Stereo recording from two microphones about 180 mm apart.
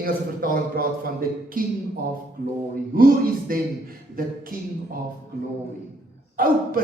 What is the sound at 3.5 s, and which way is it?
Speech, 55° right (ahead or behind).